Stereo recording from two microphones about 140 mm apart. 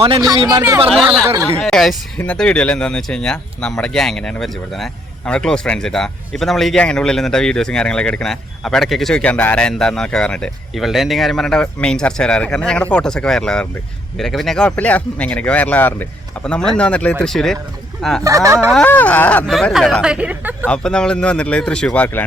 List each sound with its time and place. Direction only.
0.2 s speech: 25° right (ahead or behind)
1.5 s speech: 5° left (ahead or behind)
18.2 s speech: 20° right (ahead or behind)
18.7 s speech: 10° left (ahead or behind); by 20.7 s 10° right (ahead or behind)
20.7 s speech: 5° left (ahead or behind)